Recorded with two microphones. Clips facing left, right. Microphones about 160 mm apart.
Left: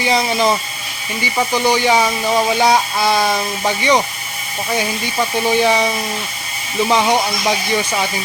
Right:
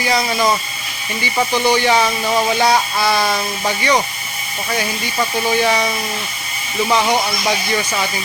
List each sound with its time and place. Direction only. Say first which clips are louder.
0.0 s speech: left 1 dB; 25° left (ahead or behind)
1.5 s speech: even; 15° left (ahead or behind)